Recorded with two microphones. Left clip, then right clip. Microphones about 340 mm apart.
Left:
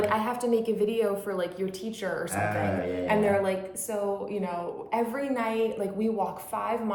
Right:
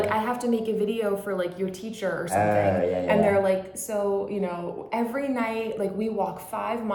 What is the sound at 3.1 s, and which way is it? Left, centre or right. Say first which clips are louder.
A woman's voice: right 3 dB; centre.